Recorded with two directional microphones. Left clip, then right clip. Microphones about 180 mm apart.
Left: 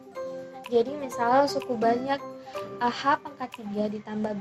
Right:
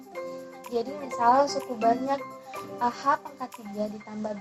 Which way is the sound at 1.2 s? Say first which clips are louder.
Right 1 dB; 30° left (ahead or behind).